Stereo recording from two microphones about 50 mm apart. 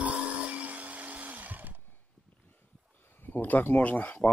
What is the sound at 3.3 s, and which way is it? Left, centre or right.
Speech, left.